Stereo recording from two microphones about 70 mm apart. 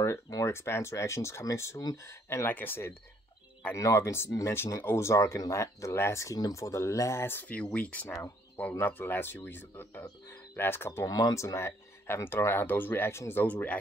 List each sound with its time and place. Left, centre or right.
0.5 s speech: left
2.4 s speech: left
3.7 s speech: left
4.3 s speech: left
4.8 s speech: left
6.3 s speech: left
10.2 s a sound: left
11.1 s speech: left